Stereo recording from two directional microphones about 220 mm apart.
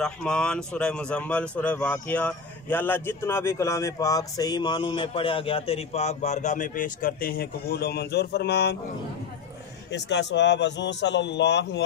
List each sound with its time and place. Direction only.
0.0 s a man's voice: 5° left (ahead or behind); by 8.7 s 50° left (ahead or behind)
9.8 s a man's voice: 55° left (ahead or behind)